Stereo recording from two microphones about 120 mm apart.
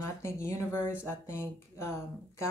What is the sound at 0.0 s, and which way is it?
Speech, 20° left (ahead or behind).